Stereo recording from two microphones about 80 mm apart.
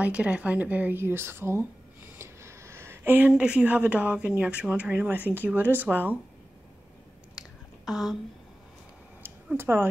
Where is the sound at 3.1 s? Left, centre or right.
Centre.